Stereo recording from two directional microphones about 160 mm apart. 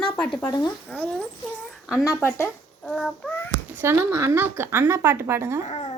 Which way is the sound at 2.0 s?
20° left (ahead or behind).